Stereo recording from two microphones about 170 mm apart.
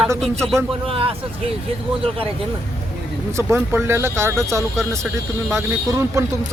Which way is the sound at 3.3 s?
15° right (ahead or behind).